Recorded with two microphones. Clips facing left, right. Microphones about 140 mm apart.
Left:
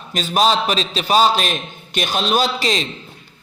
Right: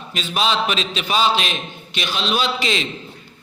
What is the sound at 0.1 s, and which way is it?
A man's voice, 40° left (ahead or behind).